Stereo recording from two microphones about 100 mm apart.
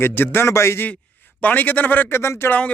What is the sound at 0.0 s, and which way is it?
Speech, 20° left (ahead or behind).